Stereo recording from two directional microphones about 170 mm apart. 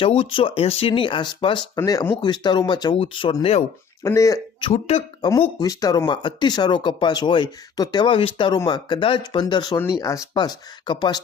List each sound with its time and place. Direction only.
0.2 s speech: 30° left (ahead or behind)
4.0 s speech: 20° left (ahead or behind)
4.7 s speech: 35° left (ahead or behind)
5.2 s speech: 20° left (ahead or behind)